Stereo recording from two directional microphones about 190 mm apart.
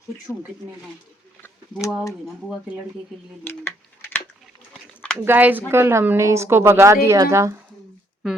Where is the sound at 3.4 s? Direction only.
10° left (ahead or behind).